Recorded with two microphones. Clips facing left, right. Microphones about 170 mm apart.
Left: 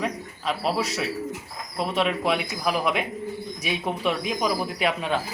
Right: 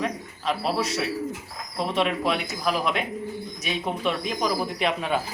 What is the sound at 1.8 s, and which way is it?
Speech, 5° left (ahead or behind).